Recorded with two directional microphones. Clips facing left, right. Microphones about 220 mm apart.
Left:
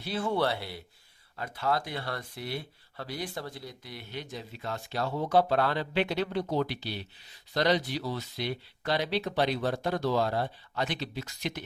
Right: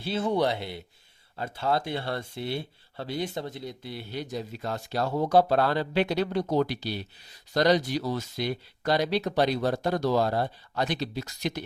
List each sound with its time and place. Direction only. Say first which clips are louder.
0.0 s speech: right 3 dB; 25° right (ahead or behind); by 11.6 s 40° right (ahead or behind)